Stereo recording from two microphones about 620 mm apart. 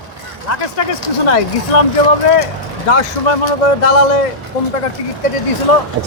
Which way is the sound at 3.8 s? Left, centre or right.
Left.